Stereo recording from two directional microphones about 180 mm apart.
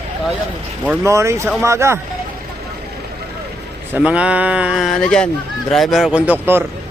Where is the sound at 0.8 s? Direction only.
10° right (ahead or behind).